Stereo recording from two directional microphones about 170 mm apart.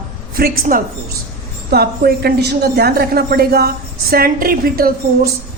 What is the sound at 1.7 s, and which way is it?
A woman's voice, 65° right (ahead or behind).